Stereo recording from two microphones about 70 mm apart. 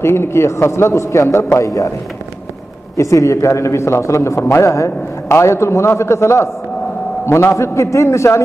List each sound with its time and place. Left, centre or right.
0.0 s a man's voice: left
3.0 s a man's voice: left